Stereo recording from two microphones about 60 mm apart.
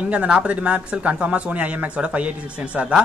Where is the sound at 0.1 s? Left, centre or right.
Right.